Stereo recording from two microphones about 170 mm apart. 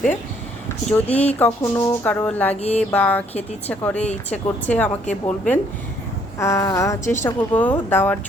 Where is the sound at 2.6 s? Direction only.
40° left (ahead or behind).